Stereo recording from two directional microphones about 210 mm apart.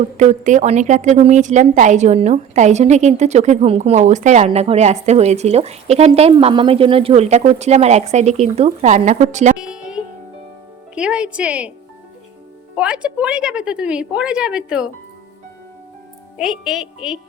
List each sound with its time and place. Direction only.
0.2 s a woman's voice: 35° right (ahead or behind)
9.6 s music: 5° right (ahead or behind)
10.9 s a woman's voice: 5° right (ahead or behind)
12.7 s a woman's voice: 5° right (ahead or behind)
16.4 s a woman's voice: centre (ahead or behind)